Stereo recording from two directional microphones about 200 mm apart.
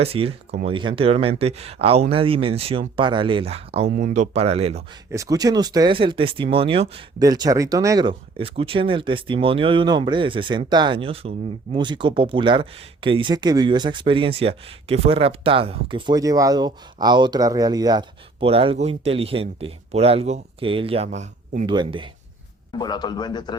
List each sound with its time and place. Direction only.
0.0 s speech: 30° right (ahead or behind)
5.1 s speech: 15° right (ahead or behind); by 21.7 s 35° right (ahead or behind)
21.7 s speech: 25° right (ahead or behind)
22.8 s a man's voice: 20° left (ahead or behind)